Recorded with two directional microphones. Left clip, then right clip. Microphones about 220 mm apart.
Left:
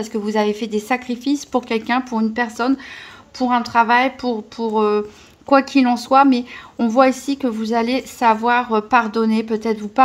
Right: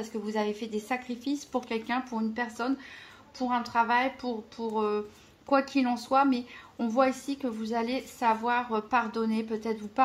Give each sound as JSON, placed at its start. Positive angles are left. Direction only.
{"t": 0.0, "sound": "a woman's voice", "side_deg": 45}